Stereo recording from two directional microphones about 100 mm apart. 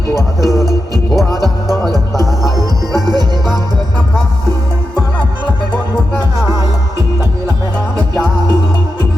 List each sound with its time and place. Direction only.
0.2 s music: 40° right (ahead or behind)